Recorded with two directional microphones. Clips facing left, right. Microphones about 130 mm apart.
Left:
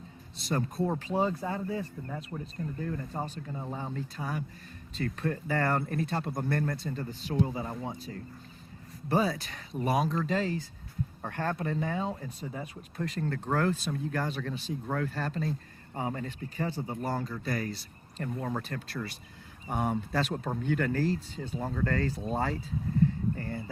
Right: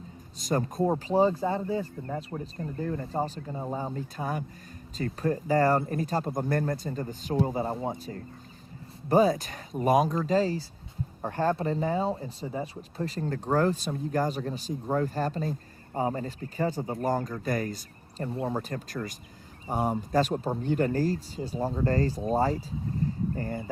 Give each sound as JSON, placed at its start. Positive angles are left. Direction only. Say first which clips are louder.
{"t": 0.3, "sound": "speech", "louder": "right 3 dB", "side_deg": -40}
{"t": 18.2, "sound": "speech", "louder": "right 3 dB", "side_deg": -30}